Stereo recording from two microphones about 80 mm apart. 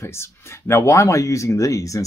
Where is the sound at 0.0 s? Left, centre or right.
Left.